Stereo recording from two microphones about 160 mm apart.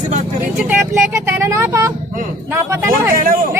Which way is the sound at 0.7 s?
10° right (ahead or behind).